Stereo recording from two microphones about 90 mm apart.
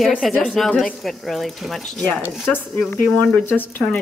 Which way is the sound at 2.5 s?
15° left (ahead or behind).